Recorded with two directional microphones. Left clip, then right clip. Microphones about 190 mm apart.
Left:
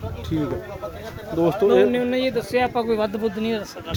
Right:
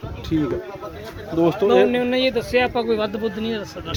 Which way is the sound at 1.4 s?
20° left (ahead or behind).